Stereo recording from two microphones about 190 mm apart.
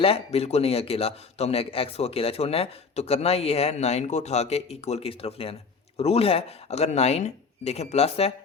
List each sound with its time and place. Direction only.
0.0 s a man's voice: 30° left (ahead or behind)